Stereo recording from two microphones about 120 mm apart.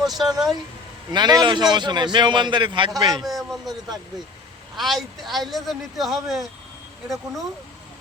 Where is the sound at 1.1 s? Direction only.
35° right (ahead or behind).